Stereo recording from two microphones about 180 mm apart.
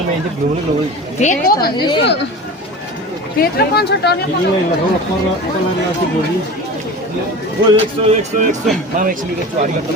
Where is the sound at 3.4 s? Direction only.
60° left (ahead or behind).